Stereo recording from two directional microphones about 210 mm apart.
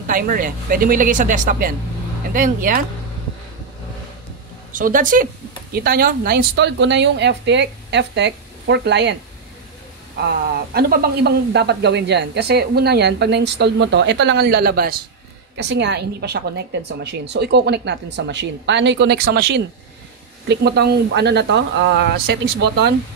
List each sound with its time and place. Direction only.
0.0 s speech: 40° right (ahead or behind)
4.7 s speech: 40° right (ahead or behind); by 9.1 s 55° right (ahead or behind)
10.2 s speech: 50° right (ahead or behind)